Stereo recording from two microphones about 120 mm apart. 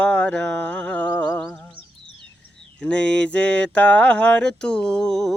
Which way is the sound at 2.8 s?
10° left (ahead or behind).